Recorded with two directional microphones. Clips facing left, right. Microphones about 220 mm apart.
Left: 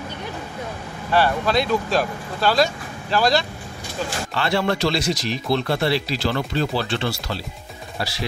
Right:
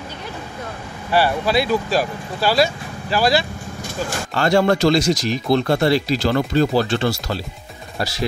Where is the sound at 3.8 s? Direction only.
45° right (ahead or behind).